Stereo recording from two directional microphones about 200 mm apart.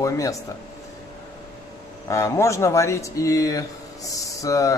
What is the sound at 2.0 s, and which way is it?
Speech, 15° left (ahead or behind).